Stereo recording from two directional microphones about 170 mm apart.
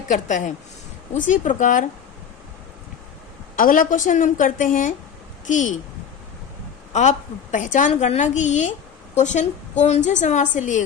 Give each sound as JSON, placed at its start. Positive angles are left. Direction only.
{"t": 0.1, "sound": "a woman's voice", "side_deg": 45}
{"t": 3.5, "sound": "a woman's voice", "side_deg": 55}
{"t": 6.9, "sound": "a woman's voice", "side_deg": 45}